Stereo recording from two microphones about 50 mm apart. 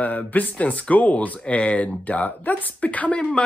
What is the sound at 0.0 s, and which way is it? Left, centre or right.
Speech, left.